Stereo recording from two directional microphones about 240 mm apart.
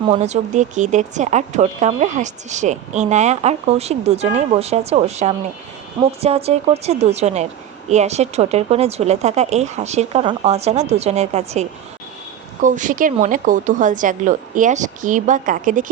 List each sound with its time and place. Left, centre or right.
0.1 s speech: right
12.6 s a woman's voice: right